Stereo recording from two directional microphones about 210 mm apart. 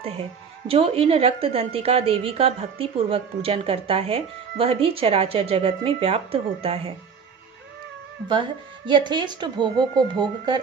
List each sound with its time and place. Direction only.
0.7 s a woman's voice: 30° right (ahead or behind)
8.3 s a woman's voice: 20° right (ahead or behind)